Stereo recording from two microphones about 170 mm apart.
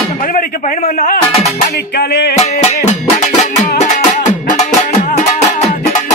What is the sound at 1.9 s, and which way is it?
Music, 75° left (ahead or behind).